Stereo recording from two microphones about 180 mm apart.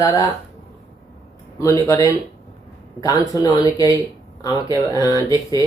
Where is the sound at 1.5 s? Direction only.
20° left (ahead or behind).